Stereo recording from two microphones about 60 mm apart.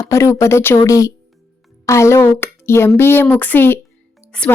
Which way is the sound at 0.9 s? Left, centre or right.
Left.